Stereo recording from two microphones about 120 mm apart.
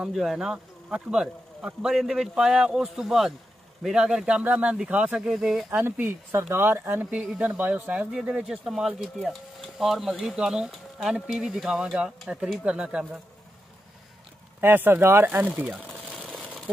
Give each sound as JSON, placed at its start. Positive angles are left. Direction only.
{"t": 0.0, "sound": "speech", "side_deg": 0}
{"t": 5.7, "sound": "speech", "side_deg": -15}
{"t": 14.6, "sound": "speech", "side_deg": -15}
{"t": 16.2, "sound": "a sound", "side_deg": -5}